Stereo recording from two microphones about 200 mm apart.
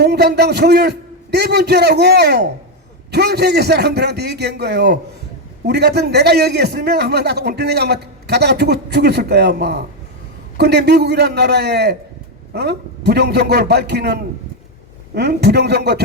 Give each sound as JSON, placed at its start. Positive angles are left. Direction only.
{"t": 0.0, "sound": "a man's voice", "side_deg": -55}